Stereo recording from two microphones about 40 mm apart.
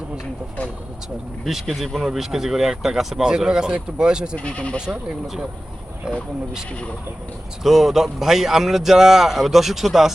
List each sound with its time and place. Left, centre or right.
1.5 s speech: centre; by 4.4 s right
4.4 s speech: left
7.6 s speech: centre